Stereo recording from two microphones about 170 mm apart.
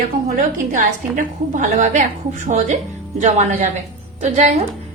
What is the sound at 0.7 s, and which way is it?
A woman's voice, 50° right (ahead or behind).